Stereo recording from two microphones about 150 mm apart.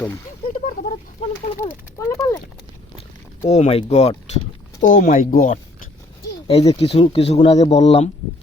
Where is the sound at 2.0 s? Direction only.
20° left (ahead or behind).